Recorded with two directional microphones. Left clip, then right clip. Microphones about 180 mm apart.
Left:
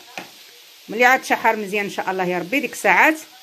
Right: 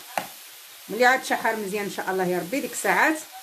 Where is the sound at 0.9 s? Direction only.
30° left (ahead or behind).